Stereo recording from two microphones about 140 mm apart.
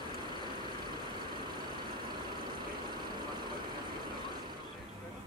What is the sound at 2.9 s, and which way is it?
Vehicle, 30° right (ahead or behind).